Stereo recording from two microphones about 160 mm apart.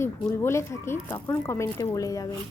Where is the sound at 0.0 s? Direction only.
15° left (ahead or behind).